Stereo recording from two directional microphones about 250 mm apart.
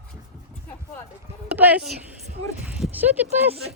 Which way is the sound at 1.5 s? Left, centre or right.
Centre.